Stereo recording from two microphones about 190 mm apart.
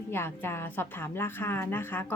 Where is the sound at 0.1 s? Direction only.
10° left (ahead or behind).